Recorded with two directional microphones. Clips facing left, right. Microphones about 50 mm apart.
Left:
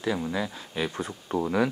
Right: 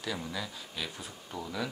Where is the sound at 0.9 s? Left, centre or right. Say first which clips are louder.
Left 12 dB; left.